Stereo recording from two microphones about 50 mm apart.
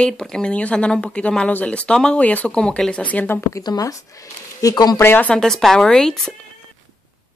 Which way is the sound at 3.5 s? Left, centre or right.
Left.